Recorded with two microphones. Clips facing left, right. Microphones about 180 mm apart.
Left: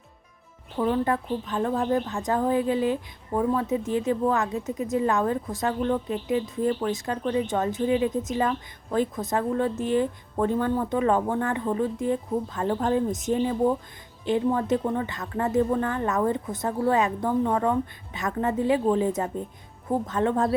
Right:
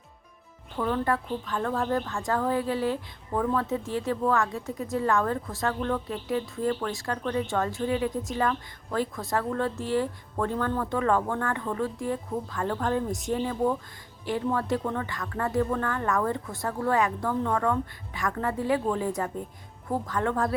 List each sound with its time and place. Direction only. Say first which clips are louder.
0.8 s a woman's voice: left 3 dB; 20° left (ahead or behind)